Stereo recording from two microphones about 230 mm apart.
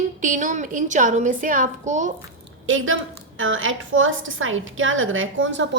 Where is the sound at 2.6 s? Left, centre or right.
Right.